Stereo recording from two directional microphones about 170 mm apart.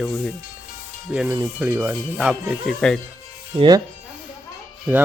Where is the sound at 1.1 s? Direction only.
5° right (ahead or behind).